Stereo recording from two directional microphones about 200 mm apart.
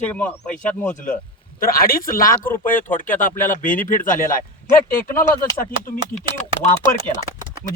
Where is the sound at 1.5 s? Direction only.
45° left (ahead or behind).